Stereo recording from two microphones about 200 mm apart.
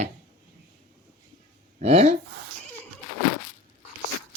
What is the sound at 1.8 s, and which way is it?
Speech, 35° right (ahead or behind).